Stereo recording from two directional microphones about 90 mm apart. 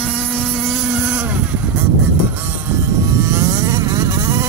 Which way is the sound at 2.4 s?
30° right (ahead or behind).